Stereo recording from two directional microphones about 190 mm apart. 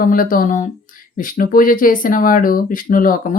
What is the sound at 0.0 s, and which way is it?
Speech, 45° left (ahead or behind).